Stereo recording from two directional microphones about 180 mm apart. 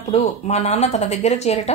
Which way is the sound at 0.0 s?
35° left (ahead or behind).